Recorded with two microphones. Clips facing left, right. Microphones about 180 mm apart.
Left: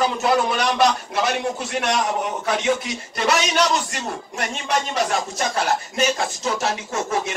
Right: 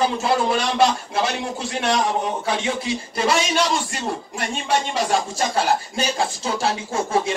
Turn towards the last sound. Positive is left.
turn(degrees=-30)  # may be behind; listen again after turning